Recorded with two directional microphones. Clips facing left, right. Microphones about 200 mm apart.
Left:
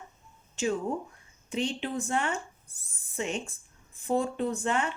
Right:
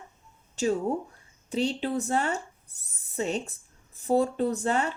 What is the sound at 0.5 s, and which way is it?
Speech, 40° right (ahead or behind).